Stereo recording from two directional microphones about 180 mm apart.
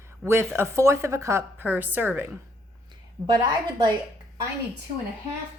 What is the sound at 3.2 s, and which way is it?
Speech, 25° right (ahead or behind).